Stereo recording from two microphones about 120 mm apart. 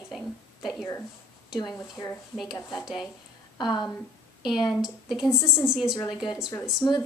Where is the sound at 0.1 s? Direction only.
Centre (ahead or behind).